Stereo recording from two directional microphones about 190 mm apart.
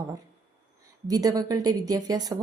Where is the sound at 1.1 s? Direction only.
20° right (ahead or behind).